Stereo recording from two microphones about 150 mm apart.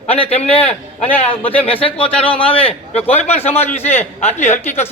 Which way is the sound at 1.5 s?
40° left (ahead or behind).